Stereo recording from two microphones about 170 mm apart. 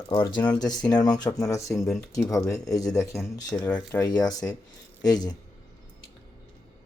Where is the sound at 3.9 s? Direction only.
25° left (ahead or behind).